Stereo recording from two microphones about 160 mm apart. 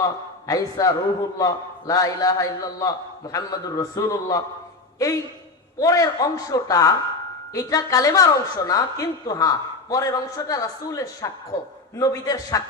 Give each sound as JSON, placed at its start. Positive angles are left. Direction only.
{"t": 0.0, "sound": "a man's voice", "side_deg": 20}